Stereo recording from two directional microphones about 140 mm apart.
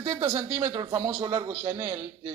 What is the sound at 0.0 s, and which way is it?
Speech, 15° right (ahead or behind).